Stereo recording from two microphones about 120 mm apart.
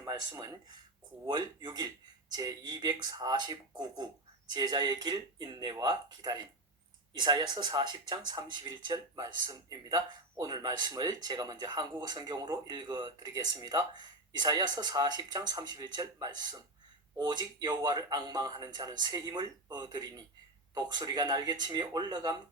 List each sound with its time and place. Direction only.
0.0 s speech: 35° right (ahead or behind)